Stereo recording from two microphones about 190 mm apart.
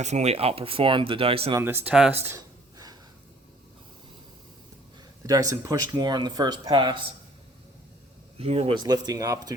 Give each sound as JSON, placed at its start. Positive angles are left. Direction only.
{"t": 0.0, "sound": "speech", "side_deg": -35}
{"t": 1.5, "sound": "speech", "side_deg": -10}
{"t": 2.2, "sound": "a sound", "side_deg": -15}
{"t": 5.2, "sound": "speech", "side_deg": -20}
{"t": 8.4, "sound": "speech", "side_deg": -30}
{"t": 8.8, "sound": "speech", "side_deg": -20}